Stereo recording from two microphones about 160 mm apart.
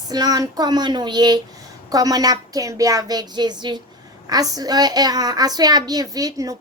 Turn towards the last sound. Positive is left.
turn(degrees=-20)  # may be behind; listen again after turning